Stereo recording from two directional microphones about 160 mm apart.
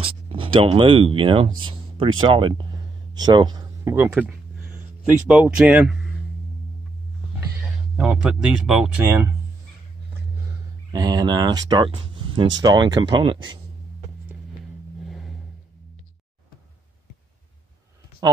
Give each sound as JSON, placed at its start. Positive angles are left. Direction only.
{"t": 0.0, "sound": "speech", "side_deg": -35}
{"t": 7.6, "sound": "speech", "side_deg": -5}
{"t": 10.9, "sound": "speech", "side_deg": -25}
{"t": 15.0, "sound": "vehicle", "side_deg": 0}
{"t": 18.2, "sound": "speech", "side_deg": -25}